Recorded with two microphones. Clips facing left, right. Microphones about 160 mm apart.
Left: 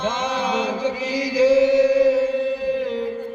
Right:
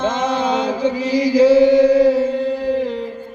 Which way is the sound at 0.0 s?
30° right (ahead or behind).